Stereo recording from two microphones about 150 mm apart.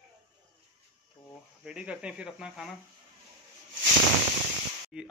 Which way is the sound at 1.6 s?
5° right (ahead or behind).